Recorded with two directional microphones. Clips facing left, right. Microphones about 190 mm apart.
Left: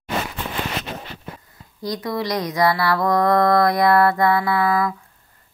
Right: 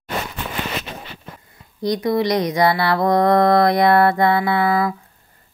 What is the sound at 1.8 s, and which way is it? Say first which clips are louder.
Mantra: right 6 dB; 20° right (ahead or behind).